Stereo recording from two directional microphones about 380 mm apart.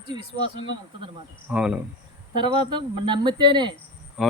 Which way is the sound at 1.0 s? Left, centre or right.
Centre.